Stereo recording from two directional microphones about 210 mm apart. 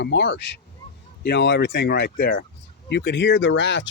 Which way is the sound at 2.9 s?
55° left (ahead or behind).